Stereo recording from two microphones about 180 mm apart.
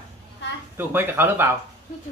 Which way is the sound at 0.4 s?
75° left (ahead or behind).